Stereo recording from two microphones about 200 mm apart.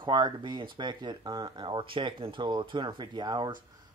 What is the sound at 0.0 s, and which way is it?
Speech, 25° right (ahead or behind).